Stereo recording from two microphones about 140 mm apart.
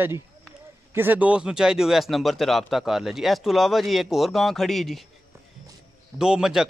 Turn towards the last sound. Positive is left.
turn(degrees=-5)  # may be behind; listen again after turning